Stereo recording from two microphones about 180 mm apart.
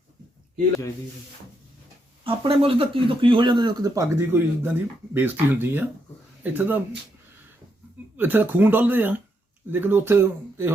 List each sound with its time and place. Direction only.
2.2 s speech: 30° right (ahead or behind); by 6.8 s 10° right (ahead or behind)
8.1 s speech: 10° right (ahead or behind)